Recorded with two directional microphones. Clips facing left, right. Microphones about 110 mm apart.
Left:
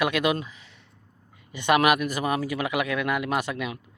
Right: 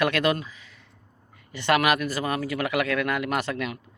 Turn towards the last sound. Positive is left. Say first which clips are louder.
# even
turn(degrees=15)  # may be behind; listen again after turning